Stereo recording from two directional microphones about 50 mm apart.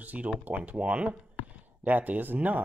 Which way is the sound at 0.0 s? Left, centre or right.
Right.